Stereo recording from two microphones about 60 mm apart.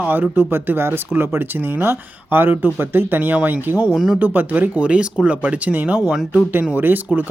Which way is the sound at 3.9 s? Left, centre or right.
Centre.